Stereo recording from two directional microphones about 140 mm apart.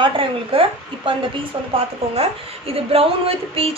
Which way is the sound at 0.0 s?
40° right (ahead or behind).